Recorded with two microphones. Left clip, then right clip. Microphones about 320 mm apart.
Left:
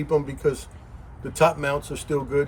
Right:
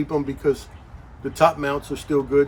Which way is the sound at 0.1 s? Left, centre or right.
Centre.